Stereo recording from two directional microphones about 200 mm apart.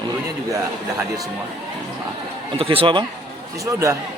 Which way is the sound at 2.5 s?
30° right (ahead or behind).